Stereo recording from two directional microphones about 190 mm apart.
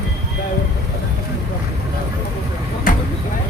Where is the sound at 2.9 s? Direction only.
50° left (ahead or behind).